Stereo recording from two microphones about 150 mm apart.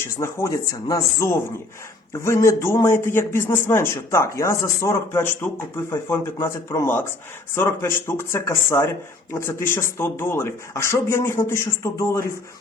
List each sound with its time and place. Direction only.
0.0 s a man's voice: 20° left (ahead or behind)